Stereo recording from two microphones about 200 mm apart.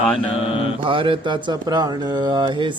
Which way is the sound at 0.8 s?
25° right (ahead or behind).